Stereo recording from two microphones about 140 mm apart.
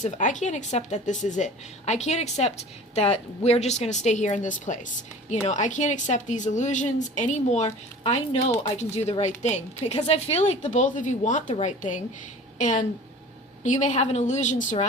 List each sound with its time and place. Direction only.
0.0 s a woman's voice: 60° left (ahead or behind)